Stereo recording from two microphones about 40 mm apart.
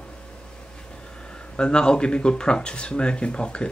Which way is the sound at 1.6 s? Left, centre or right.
Left.